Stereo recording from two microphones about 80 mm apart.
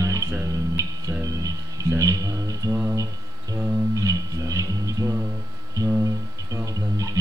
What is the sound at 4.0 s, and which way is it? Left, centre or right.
Music, right.